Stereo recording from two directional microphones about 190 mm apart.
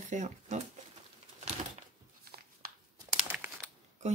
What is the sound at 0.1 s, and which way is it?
Speech, 35° right (ahead or behind).